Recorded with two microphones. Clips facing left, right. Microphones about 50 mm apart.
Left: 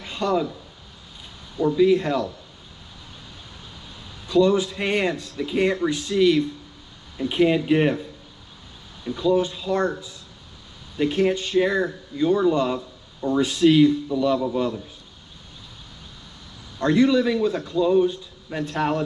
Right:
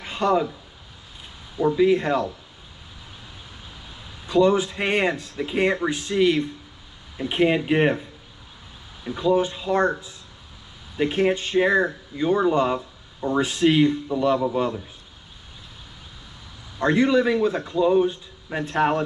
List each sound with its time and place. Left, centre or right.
0.0 s a sound: right
1.6 s speech: centre
4.3 s speech: right
16.7 s speech: right